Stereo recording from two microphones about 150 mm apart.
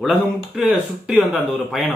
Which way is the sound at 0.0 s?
Centre (ahead or behind).